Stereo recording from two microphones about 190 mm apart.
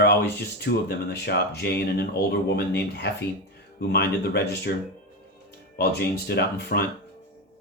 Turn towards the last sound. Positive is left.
turn(degrees=55)  # may be behind; listen again after turning